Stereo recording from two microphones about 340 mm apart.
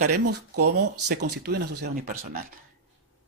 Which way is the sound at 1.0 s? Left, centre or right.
Right.